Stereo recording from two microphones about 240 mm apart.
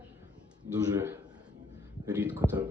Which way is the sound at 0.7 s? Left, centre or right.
Centre.